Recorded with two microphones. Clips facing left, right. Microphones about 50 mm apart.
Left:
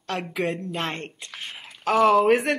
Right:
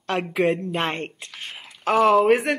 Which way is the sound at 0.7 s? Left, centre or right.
Right.